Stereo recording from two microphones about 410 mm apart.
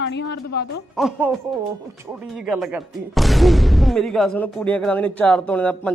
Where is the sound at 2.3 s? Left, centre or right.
Centre.